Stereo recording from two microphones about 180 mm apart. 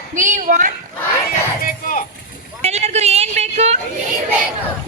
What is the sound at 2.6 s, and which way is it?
A man's voice, 35° right (ahead or behind).